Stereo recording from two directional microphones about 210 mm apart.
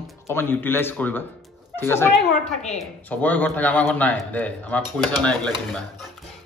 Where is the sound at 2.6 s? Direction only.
30° left (ahead or behind).